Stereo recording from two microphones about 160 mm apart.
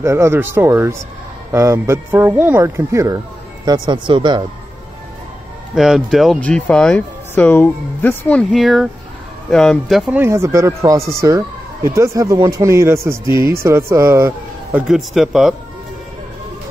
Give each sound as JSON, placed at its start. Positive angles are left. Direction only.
{"t": 0.0, "sound": "speech", "side_deg": -15}
{"t": 5.8, "sound": "speech", "side_deg": 0}
{"t": 10.1, "sound": "speech", "side_deg": -15}